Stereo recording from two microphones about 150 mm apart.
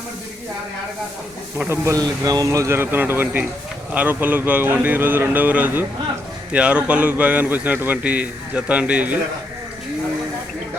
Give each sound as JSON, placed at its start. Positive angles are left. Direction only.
{"t": 1.5, "sound": "a man's voice", "side_deg": -15}